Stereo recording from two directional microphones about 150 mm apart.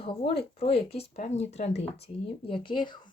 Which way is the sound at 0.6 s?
40° left (ahead or behind).